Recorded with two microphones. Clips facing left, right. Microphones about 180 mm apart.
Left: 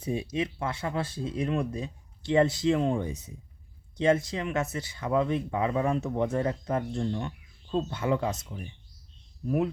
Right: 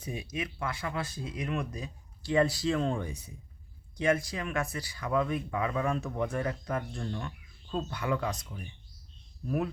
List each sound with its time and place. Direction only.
0.0 s speech: 25° left (ahead or behind)